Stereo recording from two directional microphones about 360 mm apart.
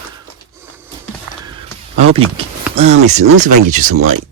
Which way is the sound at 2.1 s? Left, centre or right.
Centre.